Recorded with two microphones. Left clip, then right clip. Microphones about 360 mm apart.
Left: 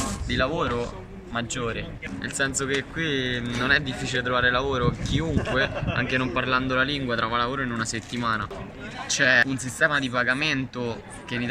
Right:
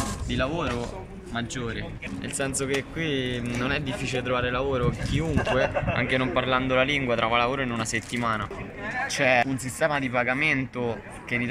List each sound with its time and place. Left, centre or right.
0.3 s speech: centre